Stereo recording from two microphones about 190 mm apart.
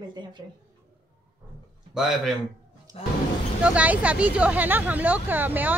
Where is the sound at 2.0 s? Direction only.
Centre (ahead or behind).